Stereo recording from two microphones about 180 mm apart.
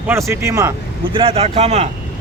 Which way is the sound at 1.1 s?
30° right (ahead or behind).